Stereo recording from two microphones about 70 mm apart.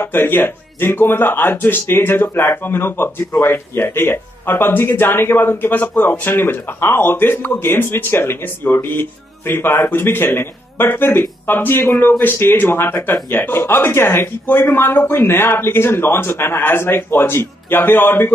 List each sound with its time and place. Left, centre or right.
0.0 s speech: left